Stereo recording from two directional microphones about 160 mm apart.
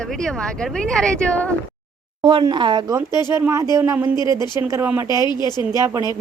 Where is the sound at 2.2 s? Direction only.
30° right (ahead or behind).